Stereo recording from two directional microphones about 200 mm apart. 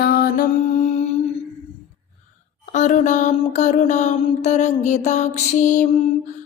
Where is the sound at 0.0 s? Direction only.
50° left (ahead or behind).